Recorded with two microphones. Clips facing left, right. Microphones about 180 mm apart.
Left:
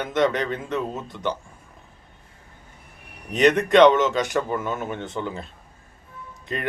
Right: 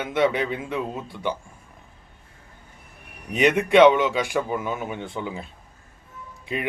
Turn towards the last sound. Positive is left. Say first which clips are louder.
# even
turn(degrees=-10)  # may be behind; listen again after turning